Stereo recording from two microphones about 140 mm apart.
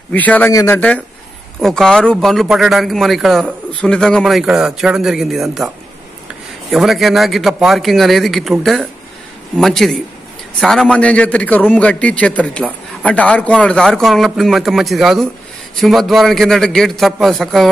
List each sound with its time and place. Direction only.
0.1 s a man's voice: 10° left (ahead or behind)
0.5 s speech: 25° left (ahead or behind)
0.7 s a man's voice: 10° left (ahead or behind)
6.7 s a man's voice: centre (ahead or behind)